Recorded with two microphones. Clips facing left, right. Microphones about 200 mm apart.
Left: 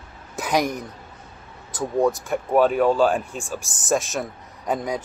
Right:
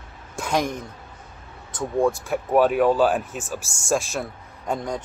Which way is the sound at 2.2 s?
5° right (ahead or behind).